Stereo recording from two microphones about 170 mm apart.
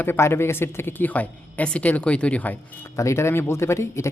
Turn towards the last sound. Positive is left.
turn(degrees=15)  # may be behind; listen again after turning